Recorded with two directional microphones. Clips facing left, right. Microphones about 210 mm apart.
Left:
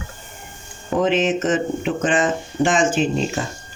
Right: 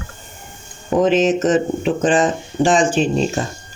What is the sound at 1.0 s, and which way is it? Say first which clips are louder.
Speech: right 4 dB; 40° right (ahead or behind).